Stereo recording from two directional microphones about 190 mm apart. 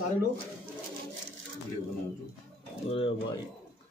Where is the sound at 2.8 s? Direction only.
30° left (ahead or behind).